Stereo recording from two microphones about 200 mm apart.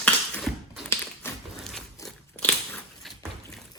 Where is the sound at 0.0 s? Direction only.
5° left (ahead or behind).